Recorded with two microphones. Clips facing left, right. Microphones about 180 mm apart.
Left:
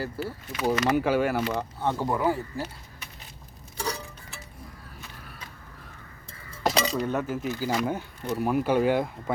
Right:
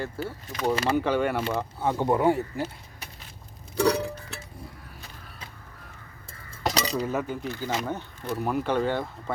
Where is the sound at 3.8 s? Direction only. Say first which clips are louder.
Right 10 dB; 65° right (ahead or behind).